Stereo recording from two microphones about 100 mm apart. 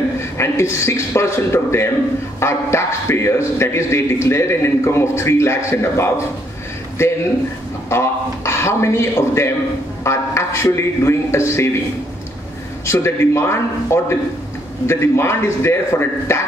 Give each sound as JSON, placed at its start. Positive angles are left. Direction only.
{"t": 0.4, "sound": "a man's voice", "side_deg": 30}
{"t": 7.9, "sound": "a man's voice", "side_deg": 25}
{"t": 12.8, "sound": "a man's voice", "side_deg": 25}